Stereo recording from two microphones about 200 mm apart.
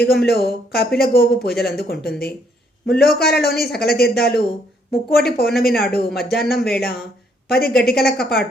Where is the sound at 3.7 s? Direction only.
50° left (ahead or behind).